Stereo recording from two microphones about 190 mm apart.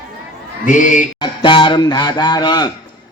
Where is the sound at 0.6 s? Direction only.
40° left (ahead or behind).